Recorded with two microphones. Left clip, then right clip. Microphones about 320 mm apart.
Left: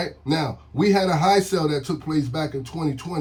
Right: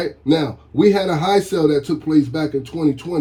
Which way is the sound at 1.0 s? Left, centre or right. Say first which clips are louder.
Right 2 dB; centre.